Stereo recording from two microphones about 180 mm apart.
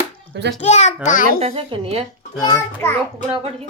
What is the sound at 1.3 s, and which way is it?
Speech, 35° right (ahead or behind).